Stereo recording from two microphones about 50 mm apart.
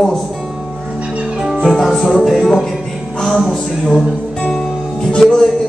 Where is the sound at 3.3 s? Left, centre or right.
Centre.